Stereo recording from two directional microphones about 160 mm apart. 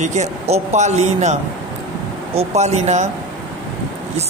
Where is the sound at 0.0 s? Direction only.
45° right (ahead or behind).